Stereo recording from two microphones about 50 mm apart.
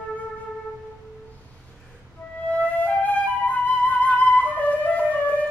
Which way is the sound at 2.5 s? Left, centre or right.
Left.